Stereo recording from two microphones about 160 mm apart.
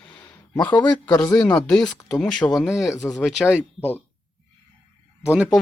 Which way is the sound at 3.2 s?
Centre (ahead or behind).